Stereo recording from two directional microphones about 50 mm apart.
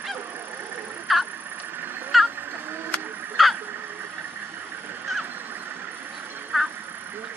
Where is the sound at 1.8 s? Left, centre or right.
Right.